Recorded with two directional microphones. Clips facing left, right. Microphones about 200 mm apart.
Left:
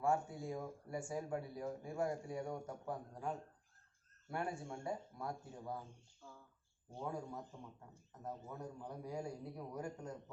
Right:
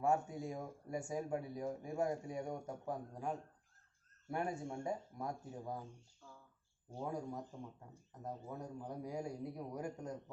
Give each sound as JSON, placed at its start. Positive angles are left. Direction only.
{"t": 0.0, "sound": "speech", "side_deg": -20}
{"t": 7.0, "sound": "a man's voice", "side_deg": -15}